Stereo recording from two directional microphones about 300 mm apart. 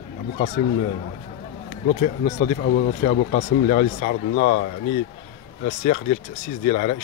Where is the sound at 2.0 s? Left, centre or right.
Left.